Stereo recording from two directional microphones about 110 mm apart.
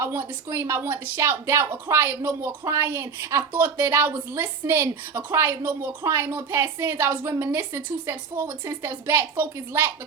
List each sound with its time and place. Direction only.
0.0 s a woman's voice: 20° right (ahead or behind)